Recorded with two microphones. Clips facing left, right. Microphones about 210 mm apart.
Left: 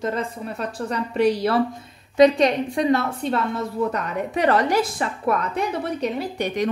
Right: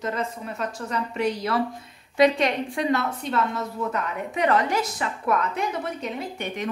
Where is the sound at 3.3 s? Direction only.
35° left (ahead or behind).